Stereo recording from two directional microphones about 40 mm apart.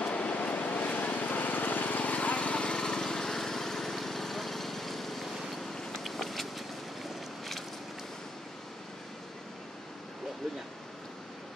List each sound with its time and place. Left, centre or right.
0.0 s vehicle: left
2.8 s lawn mower: centre
5.7 s vehicle: centre
6.0 s vehicle: centre